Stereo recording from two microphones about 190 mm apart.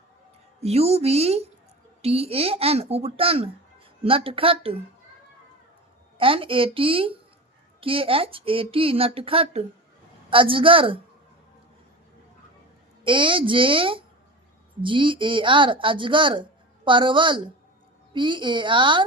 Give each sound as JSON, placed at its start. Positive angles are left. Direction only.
{"t": 0.6, "sound": "a woman's voice", "side_deg": -35}
{"t": 6.1, "sound": "speech", "side_deg": -30}
{"t": 13.1, "sound": "speech", "side_deg": -25}